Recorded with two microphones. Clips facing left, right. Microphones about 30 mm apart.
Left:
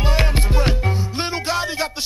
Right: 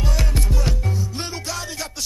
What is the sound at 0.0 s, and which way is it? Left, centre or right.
Music, left.